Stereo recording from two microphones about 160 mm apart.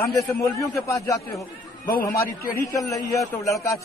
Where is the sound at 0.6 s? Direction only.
20° left (ahead or behind).